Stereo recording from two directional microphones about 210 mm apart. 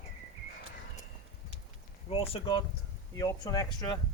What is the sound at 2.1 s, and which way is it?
Speech, 25° left (ahead or behind).